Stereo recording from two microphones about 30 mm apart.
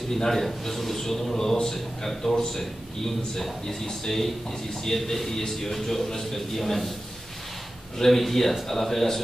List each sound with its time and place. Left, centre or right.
0.3 s a man's voice: centre
8.0 s a man's voice: centre